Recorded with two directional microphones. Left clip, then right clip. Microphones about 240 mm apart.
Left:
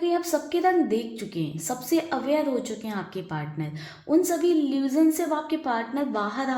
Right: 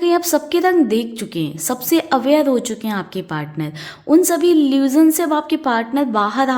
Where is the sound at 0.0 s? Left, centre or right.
Right.